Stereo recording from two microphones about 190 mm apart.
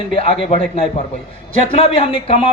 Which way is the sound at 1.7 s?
30° left (ahead or behind).